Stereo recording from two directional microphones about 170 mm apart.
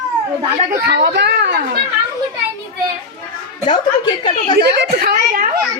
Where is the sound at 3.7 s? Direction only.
25° left (ahead or behind).